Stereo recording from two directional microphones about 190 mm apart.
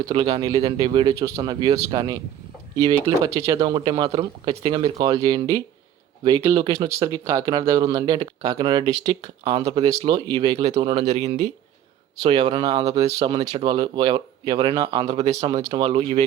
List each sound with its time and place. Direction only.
0.0 s speech: 25° right (ahead or behind)
3.3 s speech: 20° right (ahead or behind)